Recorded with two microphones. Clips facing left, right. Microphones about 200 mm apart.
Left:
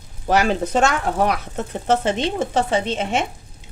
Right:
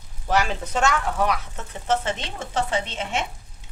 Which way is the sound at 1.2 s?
60° left (ahead or behind).